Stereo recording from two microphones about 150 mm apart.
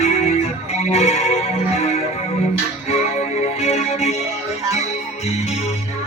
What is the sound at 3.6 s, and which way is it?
Music, 45° left (ahead or behind).